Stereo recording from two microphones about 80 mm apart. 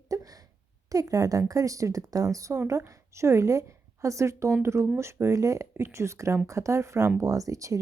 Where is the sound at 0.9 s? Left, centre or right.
Right.